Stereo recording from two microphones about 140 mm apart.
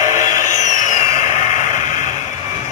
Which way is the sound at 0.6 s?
60° left (ahead or behind).